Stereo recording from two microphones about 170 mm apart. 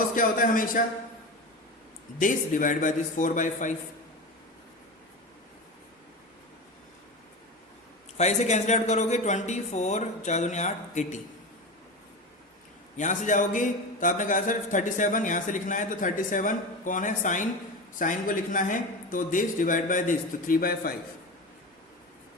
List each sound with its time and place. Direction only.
0.1 s speech: 50° left (ahead or behind)
2.1 s speech: 50° left (ahead or behind)
8.2 s speech: 40° left (ahead or behind)
13.2 s speech: 50° left (ahead or behind)